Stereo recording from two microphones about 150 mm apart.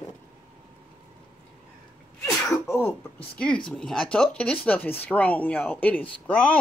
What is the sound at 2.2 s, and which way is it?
Speech, 15° left (ahead or behind).